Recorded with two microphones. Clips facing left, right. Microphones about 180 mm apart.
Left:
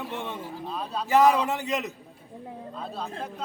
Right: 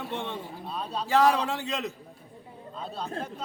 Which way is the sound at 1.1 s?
20° left (ahead or behind).